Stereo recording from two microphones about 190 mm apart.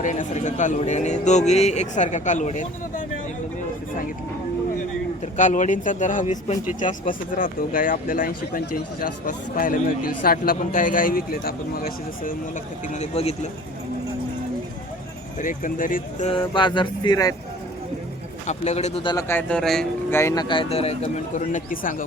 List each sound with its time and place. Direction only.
0.0 s speech: 40° left (ahead or behind)
5.2 s speech: 40° left (ahead or behind)
12.9 s speech: 35° left (ahead or behind)
15.4 s speech: 45° left (ahead or behind)
16.3 s speech: 25° left (ahead or behind)
18.4 s speech: 35° left (ahead or behind)
19.0 s speech: 15° left (ahead or behind); by 22.0 s 45° left (ahead or behind)